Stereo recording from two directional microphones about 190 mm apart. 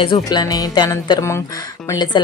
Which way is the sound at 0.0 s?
25° left (ahead or behind).